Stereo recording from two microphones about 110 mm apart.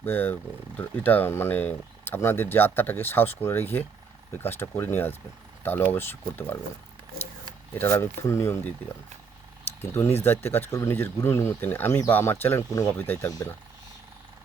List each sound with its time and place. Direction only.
0.0 s speech: 20° left (ahead or behind)
7.8 s speech: 20° left (ahead or behind)
10.2 s speech: 20° left (ahead or behind)
13.2 s speech: 30° left (ahead or behind)